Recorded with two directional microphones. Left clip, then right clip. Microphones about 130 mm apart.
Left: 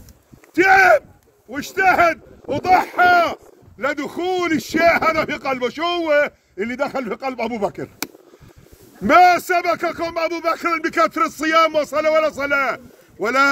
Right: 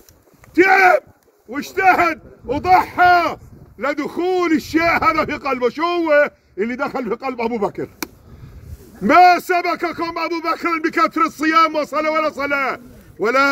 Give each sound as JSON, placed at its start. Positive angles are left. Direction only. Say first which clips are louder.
{"t": 0.6, "sound": "a sound", "louder": "even", "side_deg": 35}
{"t": 1.5, "sound": "a man's voice", "louder": "right 2 dB", "side_deg": 30}
{"t": 9.0, "sound": "a man's voice", "louder": "right 1 dB", "side_deg": 40}